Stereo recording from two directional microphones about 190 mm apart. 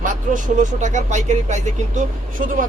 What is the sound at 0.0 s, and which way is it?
A man's voice, 40° right (ahead or behind).